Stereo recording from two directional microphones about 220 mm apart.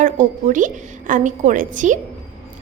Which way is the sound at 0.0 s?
35° right (ahead or behind).